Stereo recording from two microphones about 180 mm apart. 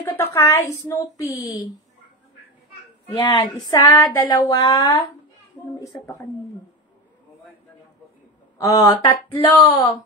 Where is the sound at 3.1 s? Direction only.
25° left (ahead or behind).